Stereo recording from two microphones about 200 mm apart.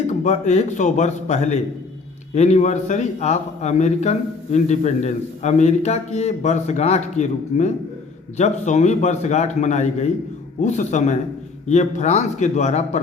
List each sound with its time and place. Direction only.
0.1 s a man's voice: 35° left (ahead or behind)